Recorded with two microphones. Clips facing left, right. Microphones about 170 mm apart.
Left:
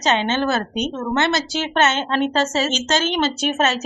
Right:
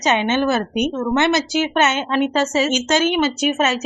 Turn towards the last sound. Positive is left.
turn(degrees=-5)  # may be behind; listen again after turning